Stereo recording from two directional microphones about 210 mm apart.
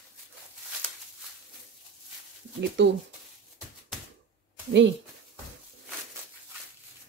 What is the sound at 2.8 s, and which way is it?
Speech, 55° right (ahead or behind).